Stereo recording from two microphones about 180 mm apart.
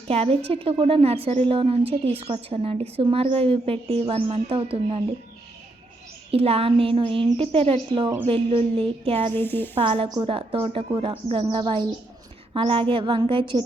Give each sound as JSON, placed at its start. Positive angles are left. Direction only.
{"t": 0.1, "sound": "a woman's voice", "side_deg": -35}
{"t": 6.3, "sound": "a woman's voice", "side_deg": -35}
{"t": 9.3, "sound": "speech", "side_deg": 10}
{"t": 9.7, "sound": "a woman's voice", "side_deg": -30}